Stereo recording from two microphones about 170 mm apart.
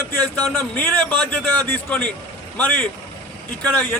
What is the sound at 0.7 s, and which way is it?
Speech, 10° left (ahead or behind).